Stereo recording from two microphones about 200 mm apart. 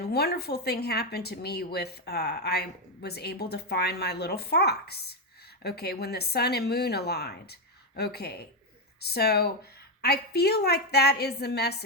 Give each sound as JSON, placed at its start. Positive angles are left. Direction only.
{"t": 0.0, "sound": "speech", "side_deg": 55}